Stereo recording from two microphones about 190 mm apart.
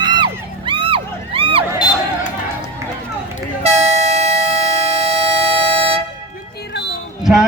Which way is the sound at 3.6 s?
35° right (ahead or behind).